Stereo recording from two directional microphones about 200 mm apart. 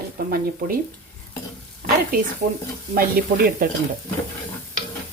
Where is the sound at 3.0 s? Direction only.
50° right (ahead or behind).